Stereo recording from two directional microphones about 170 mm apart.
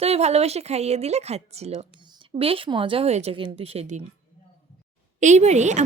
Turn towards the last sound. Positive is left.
turn(degrees=-45)  # may be behind; listen again after turning